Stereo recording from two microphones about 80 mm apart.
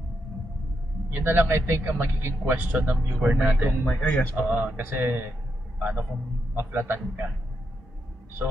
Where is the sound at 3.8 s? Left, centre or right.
Centre.